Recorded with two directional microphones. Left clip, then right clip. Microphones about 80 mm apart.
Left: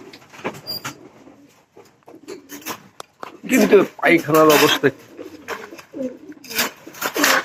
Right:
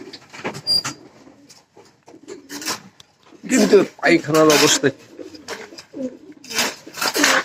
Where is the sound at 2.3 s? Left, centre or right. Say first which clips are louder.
Right 4 dB; right.